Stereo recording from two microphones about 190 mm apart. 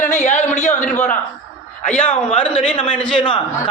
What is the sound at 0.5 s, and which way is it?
Speech, 40° left (ahead or behind).